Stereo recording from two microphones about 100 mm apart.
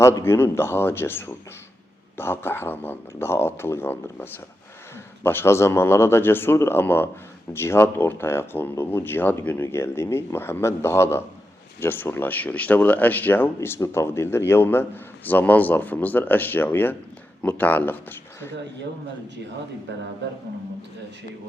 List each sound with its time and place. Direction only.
0.0 s speech: 30° left (ahead or behind)